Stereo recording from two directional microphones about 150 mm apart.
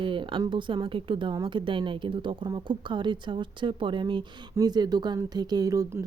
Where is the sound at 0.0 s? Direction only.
35° right (ahead or behind).